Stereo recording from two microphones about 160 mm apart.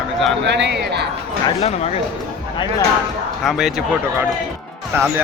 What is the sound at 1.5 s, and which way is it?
Speech, 40° left (ahead or behind).